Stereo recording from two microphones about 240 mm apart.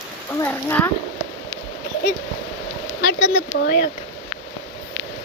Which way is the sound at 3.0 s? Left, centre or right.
Left.